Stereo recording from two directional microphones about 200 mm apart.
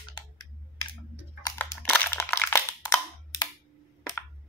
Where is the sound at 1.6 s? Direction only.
10° left (ahead or behind).